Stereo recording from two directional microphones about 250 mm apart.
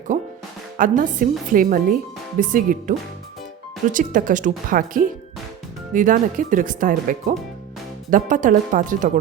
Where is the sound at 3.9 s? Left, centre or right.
Right.